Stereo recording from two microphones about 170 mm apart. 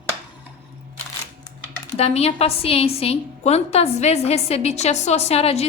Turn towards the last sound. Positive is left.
turn(degrees=35)  # may be behind; listen again after turning